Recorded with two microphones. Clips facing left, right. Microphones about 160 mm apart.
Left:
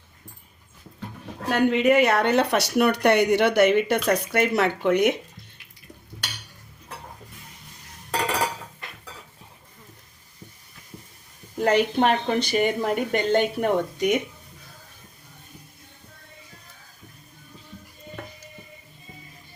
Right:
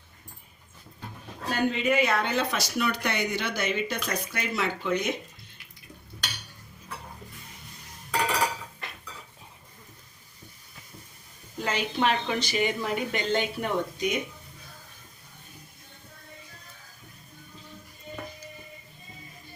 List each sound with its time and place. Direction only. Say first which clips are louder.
1.5 s speech: left 7 dB; 70° left (ahead or behind)
11.6 s a woman's voice: left 7 dB; 60° left (ahead or behind)